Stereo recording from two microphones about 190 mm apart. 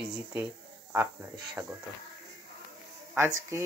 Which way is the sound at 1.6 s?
5° right (ahead or behind).